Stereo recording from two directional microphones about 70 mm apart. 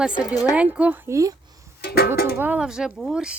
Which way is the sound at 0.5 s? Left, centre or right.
Centre.